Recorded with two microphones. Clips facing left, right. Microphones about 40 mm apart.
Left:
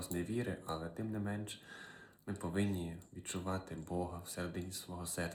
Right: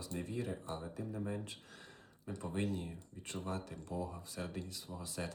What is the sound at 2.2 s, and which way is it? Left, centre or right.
Speech, left.